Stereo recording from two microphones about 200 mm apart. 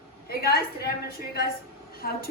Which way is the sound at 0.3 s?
50° left (ahead or behind).